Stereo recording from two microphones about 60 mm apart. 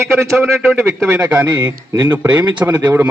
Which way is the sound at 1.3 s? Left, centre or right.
Right.